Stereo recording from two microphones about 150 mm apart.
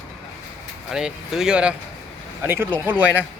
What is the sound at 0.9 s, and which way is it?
Speech, 5° right (ahead or behind).